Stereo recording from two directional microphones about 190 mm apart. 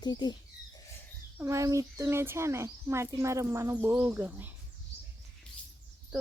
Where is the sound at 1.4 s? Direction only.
15° right (ahead or behind).